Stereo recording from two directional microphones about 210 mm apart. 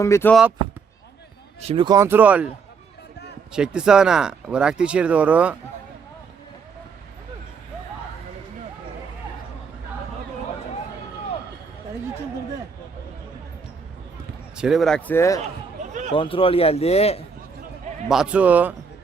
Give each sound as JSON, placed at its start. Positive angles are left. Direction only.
{"t": 0.0, "sound": "speech", "side_deg": 10}
{"t": 1.6, "sound": "speech", "side_deg": -25}
{"t": 3.5, "sound": "speech", "side_deg": -5}
{"t": 14.5, "sound": "speech", "side_deg": -5}
{"t": 15.8, "sound": "a sound", "side_deg": -35}
{"t": 16.1, "sound": "a man's voice", "side_deg": 25}
{"t": 18.1, "sound": "speech", "side_deg": -5}